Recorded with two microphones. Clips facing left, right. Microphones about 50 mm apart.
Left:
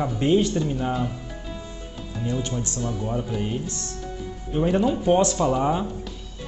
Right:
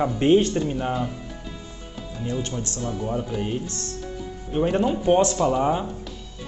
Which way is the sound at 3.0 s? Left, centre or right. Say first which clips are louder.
Right 2 dB; centre.